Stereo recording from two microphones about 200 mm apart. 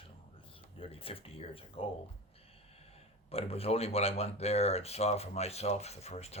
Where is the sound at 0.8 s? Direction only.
30° left (ahead or behind).